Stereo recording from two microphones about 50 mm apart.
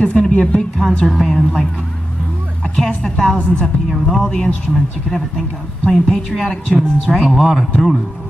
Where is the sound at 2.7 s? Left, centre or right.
Centre.